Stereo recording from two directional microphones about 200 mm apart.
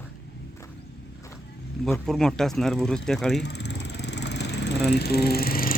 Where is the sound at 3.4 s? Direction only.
55° left (ahead or behind).